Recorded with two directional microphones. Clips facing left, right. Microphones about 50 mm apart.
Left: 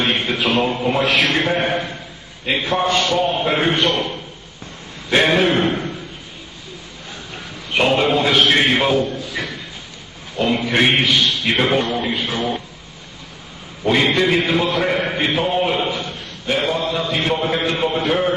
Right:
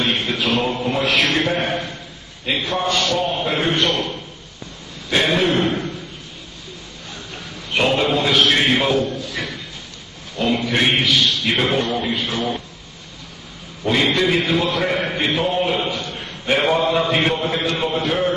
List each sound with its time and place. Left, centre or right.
0.1 s a man's voice: centre
5.1 s a man's voice: left
5.6 s a man's voice: centre
7.7 s a man's voice: centre
13.8 s a man's voice: centre
16.4 s a man's voice: right
17.3 s a man's voice: centre